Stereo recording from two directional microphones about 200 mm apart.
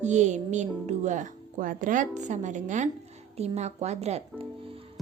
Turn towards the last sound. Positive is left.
turn(degrees=-30)  # may be behind; listen again after turning